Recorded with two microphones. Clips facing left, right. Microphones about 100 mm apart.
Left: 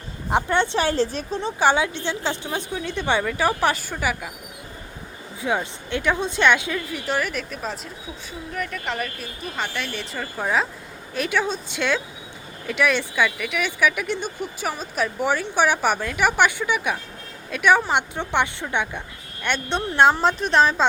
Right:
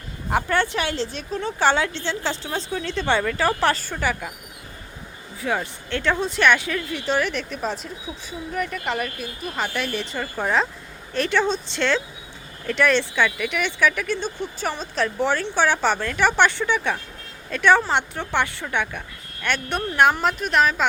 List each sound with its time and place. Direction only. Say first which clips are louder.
0.3 s speech: left 1 dB; 20° left (ahead or behind)
0.8 s speech: left 4 dB; 35° left (ahead or behind)
1.4 s speech: even; 20° left (ahead or behind)
5.4 s a woman's voice: left 1 dB; 15° left (ahead or behind)